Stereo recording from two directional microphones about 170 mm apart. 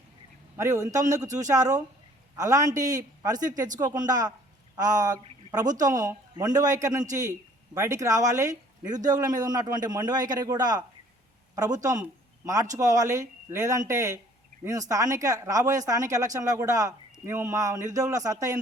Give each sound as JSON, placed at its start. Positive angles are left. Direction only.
{"t": 0.5, "sound": "speech", "side_deg": -20}